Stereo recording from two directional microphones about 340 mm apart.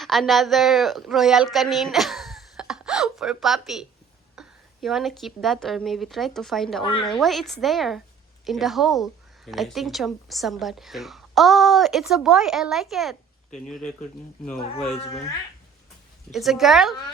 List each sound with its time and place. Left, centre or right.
0.0 s a woman's voice: centre
14.8 s speech: centre
16.3 s a woman's voice: centre